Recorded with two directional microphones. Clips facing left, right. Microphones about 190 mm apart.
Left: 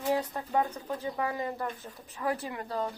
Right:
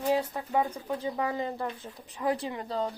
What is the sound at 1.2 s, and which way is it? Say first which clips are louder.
A woman's voice: right 1 dB; 25° right (ahead or behind).